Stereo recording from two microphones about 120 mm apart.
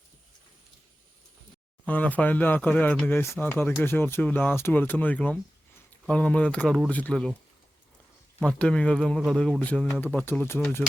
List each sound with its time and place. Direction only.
1.9 s speech: 15° left (ahead or behind)
8.4 s speech: 10° left (ahead or behind)